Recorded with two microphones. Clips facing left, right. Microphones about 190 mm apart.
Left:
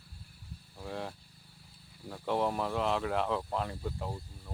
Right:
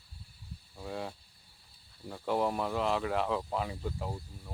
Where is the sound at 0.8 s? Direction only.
Centre (ahead or behind).